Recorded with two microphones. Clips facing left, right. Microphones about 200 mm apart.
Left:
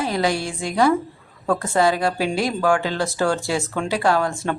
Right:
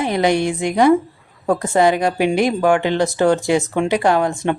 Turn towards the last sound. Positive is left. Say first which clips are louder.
# right 4 dB
turn(degrees=-20)  # may be behind; listen again after turning